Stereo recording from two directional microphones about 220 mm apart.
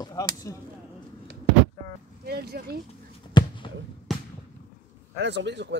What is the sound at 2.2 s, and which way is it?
Speech, 45° right (ahead or behind).